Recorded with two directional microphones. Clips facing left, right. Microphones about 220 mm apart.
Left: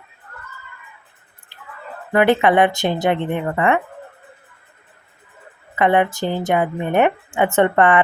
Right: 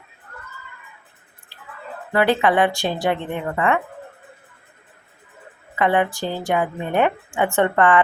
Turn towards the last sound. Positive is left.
turn(degrees=20)  # may be behind; listen again after turning